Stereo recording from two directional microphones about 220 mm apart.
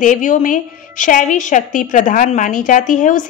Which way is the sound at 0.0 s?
35° left (ahead or behind).